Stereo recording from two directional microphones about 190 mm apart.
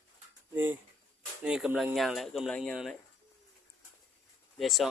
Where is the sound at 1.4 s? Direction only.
5° right (ahead or behind).